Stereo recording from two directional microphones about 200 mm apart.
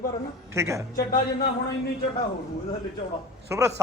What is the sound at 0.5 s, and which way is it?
Speech, 15° right (ahead or behind).